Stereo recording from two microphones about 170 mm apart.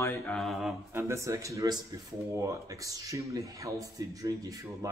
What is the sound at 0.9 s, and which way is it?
Speech, 15° right (ahead or behind).